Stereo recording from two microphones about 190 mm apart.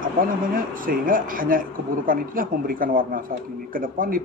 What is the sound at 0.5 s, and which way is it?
Speech, 50° right (ahead or behind).